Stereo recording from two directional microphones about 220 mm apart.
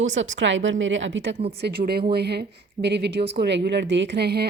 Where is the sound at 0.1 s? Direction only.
55° right (ahead or behind).